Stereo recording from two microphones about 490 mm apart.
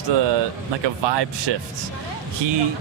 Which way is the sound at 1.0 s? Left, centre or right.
Right.